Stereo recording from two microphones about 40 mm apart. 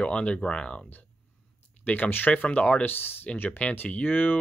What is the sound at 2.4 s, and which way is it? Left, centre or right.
Speech, left.